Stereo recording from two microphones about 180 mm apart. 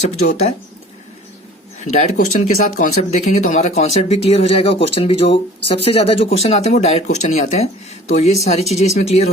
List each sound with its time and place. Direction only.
0.1 s speech: 35° left (ahead or behind)
1.8 s speech: 40° left (ahead or behind)